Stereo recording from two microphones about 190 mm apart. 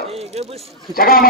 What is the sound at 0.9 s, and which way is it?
Speech, 50° left (ahead or behind).